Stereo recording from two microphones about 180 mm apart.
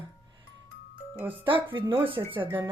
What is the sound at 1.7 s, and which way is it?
Speech, 30° right (ahead or behind).